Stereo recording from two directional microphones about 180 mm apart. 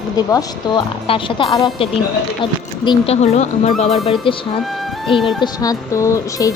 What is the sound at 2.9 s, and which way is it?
A woman's voice, 35° left (ahead or behind).